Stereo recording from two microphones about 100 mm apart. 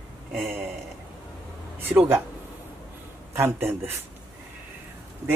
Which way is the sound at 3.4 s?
25° right (ahead or behind).